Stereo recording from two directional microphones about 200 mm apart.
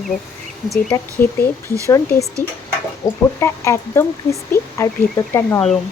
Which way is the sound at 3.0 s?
15° left (ahead or behind).